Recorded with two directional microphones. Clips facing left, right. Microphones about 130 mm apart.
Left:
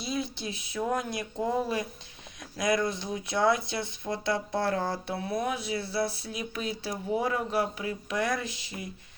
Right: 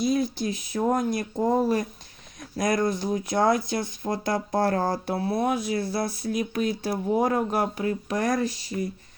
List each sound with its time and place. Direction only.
0.0 s speech: 45° right (ahead or behind)